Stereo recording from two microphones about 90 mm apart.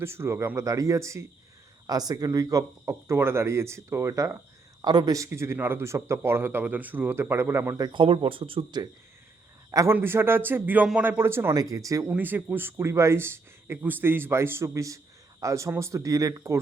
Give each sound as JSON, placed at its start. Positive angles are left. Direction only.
{"t": 0.0, "sound": "speech", "side_deg": -30}
{"t": 1.9, "sound": "speech", "side_deg": -45}
{"t": 4.8, "sound": "a man's voice", "side_deg": -50}
{"t": 5.1, "sound": "speech", "side_deg": -35}
{"t": 7.9, "sound": "speech", "side_deg": -80}
{"t": 9.9, "sound": "speech", "side_deg": -25}
{"t": 11.5, "sound": "speech", "side_deg": -40}
{"t": 12.1, "sound": "speech", "side_deg": -20}